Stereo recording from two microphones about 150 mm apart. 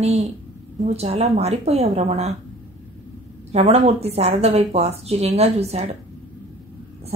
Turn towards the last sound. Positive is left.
turn(degrees=-45)  # may be behind; listen again after turning